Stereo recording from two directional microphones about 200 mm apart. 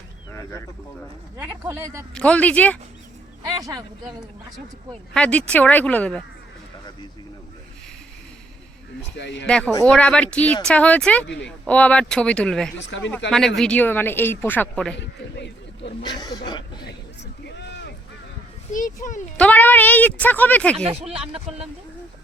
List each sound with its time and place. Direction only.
1.4 s speech: 15° right (ahead or behind)
2.1 s a woman's voice: 5° left (ahead or behind)
3.4 s speech: 20° right (ahead or behind)
5.1 s a woman's voice: 5° left (ahead or behind)
9.1 s speech: 60° left (ahead or behind)
9.5 s speech: 5° left (ahead or behind)
12.9 s speech: 65° left (ahead or behind)
13.6 s a woman's voice: 5° left (ahead or behind)
14.9 s speech: 60° left (ahead or behind)
16.0 s speech: 20° left (ahead or behind)
17.4 s boat: 55° left (ahead or behind)
18.7 s a child's voice: 40° left (ahead or behind)
19.4 s a woman's voice: 10° left (ahead or behind)
20.7 s speech: 30° right (ahead or behind)